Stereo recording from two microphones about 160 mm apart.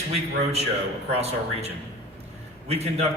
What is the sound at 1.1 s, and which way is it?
A man's voice, 40° right (ahead or behind).